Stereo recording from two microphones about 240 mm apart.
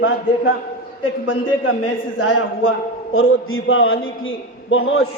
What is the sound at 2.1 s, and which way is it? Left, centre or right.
Speech, left.